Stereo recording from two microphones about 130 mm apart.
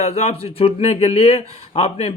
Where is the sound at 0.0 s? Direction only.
55° left (ahead or behind).